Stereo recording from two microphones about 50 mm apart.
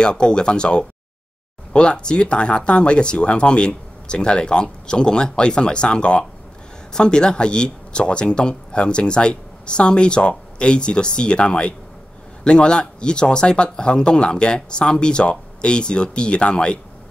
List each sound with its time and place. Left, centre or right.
0.0 s speech: centre